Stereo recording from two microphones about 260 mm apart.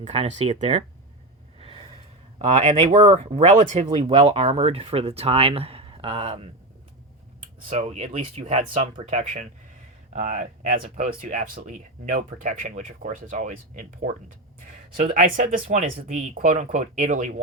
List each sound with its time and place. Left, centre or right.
0.0 s speech: right
1.6 s gasp: centre
2.4 s speech: right
7.7 s speech: right